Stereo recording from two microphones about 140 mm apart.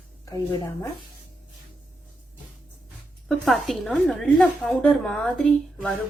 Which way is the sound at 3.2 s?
Centre (ahead or behind).